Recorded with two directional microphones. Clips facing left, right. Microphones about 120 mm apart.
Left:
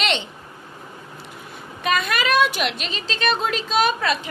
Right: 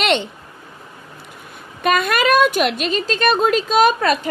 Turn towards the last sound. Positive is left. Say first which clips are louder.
# right 6 dB
turn(degrees=-45)  # may be behind; listen again after turning